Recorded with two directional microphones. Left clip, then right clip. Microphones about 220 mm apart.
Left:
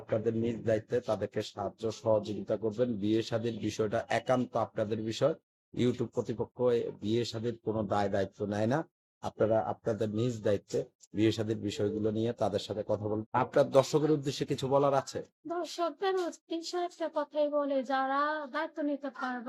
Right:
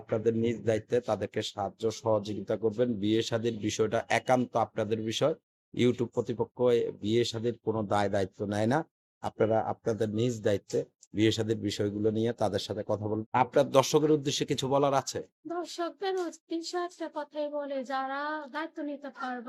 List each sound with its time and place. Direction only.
0.3 s speech: 40° right (ahead or behind)
15.4 s a child's voice: 5° right (ahead or behind)